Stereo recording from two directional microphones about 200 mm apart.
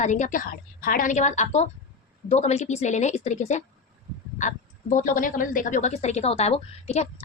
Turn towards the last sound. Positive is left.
turn(degrees=35)  # may be behind; listen again after turning